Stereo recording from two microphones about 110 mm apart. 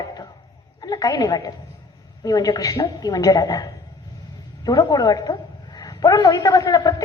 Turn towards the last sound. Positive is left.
turn(degrees=30)  # may be behind; listen again after turning